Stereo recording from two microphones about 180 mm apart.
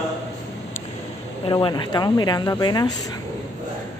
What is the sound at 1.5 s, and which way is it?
Speech, 30° left (ahead or behind).